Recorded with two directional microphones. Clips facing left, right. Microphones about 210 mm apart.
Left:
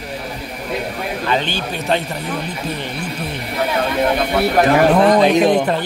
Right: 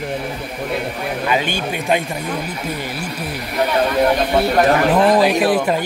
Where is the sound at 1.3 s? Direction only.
10° right (ahead or behind).